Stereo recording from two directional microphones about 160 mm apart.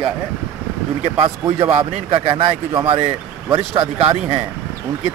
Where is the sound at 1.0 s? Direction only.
35° right (ahead or behind).